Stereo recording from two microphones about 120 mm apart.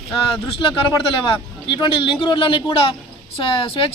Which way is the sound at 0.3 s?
50° left (ahead or behind).